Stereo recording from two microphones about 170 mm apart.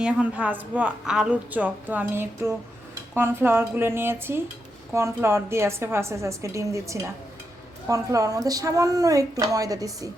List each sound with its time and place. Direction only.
0.0 s a woman's voice: 5° right (ahead or behind)